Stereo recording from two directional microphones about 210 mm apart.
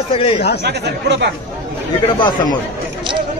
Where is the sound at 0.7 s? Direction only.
55° right (ahead or behind).